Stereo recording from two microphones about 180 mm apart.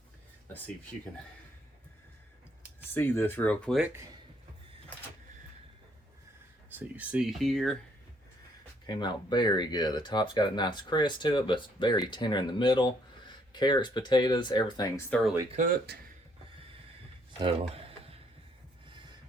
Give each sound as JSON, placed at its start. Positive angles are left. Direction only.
{"t": 2.9, "sound": "speech", "side_deg": 10}
{"t": 6.7, "sound": "speech", "side_deg": -5}
{"t": 8.9, "sound": "speech", "side_deg": 25}
{"t": 15.1, "sound": "speech", "side_deg": 0}
{"t": 15.5, "sound": "speech", "side_deg": -50}
{"t": 17.4, "sound": "a sound", "side_deg": -30}